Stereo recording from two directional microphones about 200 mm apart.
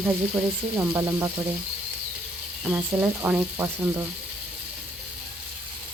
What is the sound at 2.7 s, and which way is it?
Speech, 10° right (ahead or behind).